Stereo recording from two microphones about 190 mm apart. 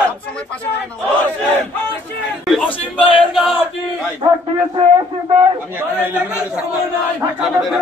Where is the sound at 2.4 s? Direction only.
5° left (ahead or behind).